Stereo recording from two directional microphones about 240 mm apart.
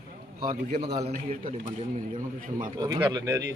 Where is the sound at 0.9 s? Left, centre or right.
Right.